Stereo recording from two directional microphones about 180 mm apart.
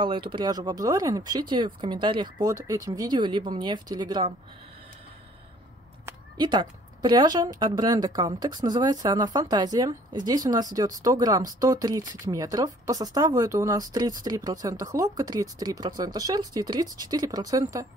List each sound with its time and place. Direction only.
0.0 s speech: 30° right (ahead or behind)
6.0 s speech: 25° right (ahead or behind)